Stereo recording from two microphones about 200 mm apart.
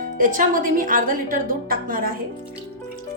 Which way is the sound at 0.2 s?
40° right (ahead or behind).